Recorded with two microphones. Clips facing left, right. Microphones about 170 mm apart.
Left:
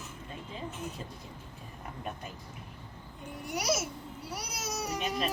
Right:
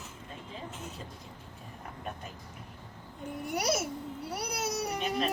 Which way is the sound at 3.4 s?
55° right (ahead or behind).